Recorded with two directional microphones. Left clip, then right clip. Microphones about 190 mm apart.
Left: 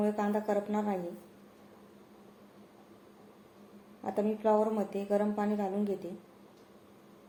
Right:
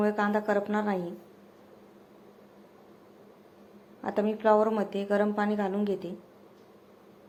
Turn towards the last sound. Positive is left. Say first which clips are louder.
# right 4 dB
turn(degrees=-25)  # may be behind; listen again after turning